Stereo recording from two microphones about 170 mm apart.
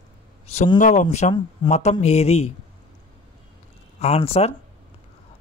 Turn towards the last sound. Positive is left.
turn(degrees=35)  # may be behind; listen again after turning